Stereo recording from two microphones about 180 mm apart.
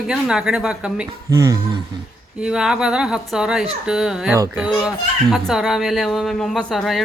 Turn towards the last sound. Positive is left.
turn(degrees=0)  # may be behind; listen again after turning